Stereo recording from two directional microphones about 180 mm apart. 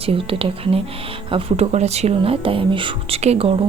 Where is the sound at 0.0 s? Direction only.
30° right (ahead or behind).